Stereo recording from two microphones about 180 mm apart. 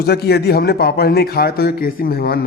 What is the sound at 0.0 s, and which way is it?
A man's voice, 65° left (ahead or behind).